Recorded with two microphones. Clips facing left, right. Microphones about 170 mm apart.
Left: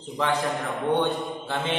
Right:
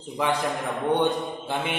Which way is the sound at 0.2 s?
10° right (ahead or behind).